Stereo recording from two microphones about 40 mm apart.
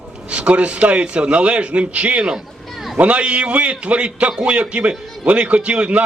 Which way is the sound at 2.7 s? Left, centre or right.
Centre.